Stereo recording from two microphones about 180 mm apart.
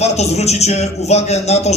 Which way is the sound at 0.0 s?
35° left (ahead or behind).